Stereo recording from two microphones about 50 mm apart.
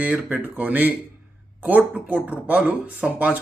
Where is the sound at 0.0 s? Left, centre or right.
Right.